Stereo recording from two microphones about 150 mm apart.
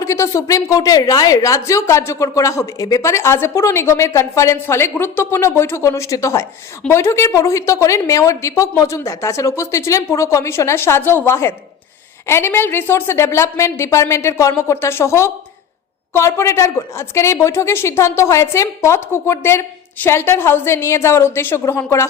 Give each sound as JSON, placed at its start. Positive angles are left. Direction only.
{"t": 0.0, "sound": "a woman's voice", "side_deg": 20}